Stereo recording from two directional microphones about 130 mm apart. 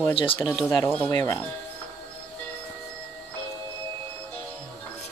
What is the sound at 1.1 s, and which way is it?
Speech, 25° left (ahead or behind).